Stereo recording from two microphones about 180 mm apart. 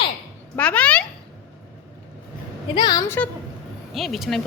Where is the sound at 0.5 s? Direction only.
5° left (ahead or behind).